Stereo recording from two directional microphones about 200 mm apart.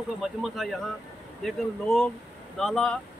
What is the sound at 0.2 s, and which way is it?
Speech, centre (ahead or behind).